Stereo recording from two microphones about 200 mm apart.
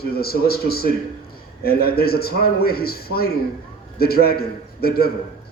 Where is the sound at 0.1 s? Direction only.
50° left (ahead or behind).